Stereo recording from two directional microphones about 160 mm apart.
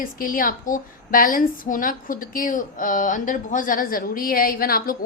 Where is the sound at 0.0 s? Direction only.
60° left (ahead or behind).